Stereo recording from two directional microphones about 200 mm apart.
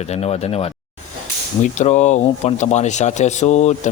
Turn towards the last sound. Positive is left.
turn(degrees=35)  # may be behind; listen again after turning